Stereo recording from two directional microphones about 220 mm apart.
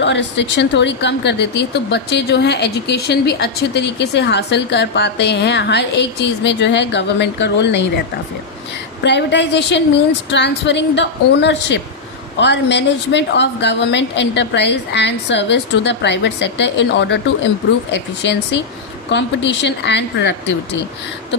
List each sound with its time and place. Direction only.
0.0 s speech: 55° left (ahead or behind)
9.0 s speech: 50° left (ahead or behind)